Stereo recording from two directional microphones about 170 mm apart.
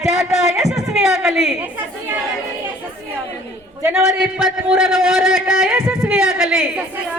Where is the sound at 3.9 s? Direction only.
5° right (ahead or behind).